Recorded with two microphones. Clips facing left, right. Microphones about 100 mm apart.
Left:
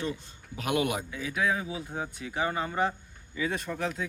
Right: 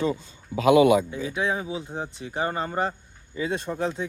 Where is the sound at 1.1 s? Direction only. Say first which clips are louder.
Right 3 dB; 25° right (ahead or behind).